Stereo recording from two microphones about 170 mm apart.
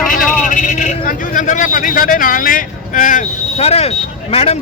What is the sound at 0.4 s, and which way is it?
A man's voice, 50° left (ahead or behind).